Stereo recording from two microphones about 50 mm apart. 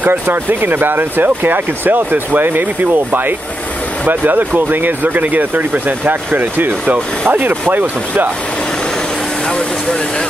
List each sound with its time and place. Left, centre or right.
0.0 s speech: right